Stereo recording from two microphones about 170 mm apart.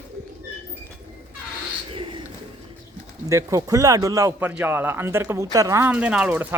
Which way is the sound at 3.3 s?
20° right (ahead or behind).